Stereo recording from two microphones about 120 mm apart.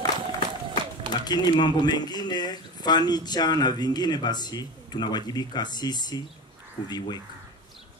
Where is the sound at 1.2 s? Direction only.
35° left (ahead or behind).